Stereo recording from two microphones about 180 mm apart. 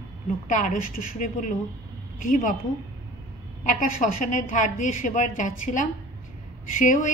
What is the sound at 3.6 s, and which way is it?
A woman's voice, 45° left (ahead or behind).